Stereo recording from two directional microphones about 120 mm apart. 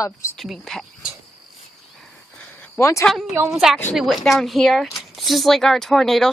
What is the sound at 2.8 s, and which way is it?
Speech, 25° left (ahead or behind).